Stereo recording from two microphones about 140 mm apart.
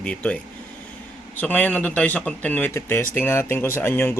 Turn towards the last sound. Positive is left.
turn(degrees=15)  # may be behind; listen again after turning